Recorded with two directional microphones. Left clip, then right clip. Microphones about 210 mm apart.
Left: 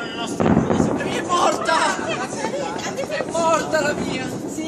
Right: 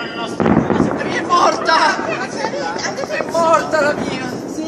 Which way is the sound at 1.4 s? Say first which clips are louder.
Right 5 dB; 40° left (ahead or behind).